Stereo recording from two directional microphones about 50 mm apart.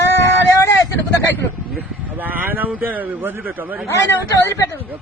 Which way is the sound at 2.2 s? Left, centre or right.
Right.